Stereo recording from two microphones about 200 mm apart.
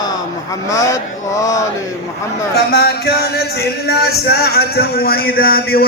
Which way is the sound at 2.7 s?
50° left (ahead or behind).